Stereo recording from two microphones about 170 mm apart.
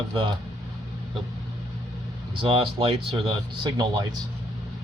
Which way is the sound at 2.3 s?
30° right (ahead or behind).